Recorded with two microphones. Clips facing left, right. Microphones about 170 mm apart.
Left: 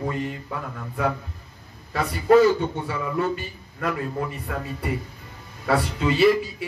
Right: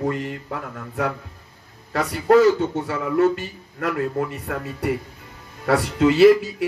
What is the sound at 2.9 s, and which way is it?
A man's voice, 75° right (ahead or behind).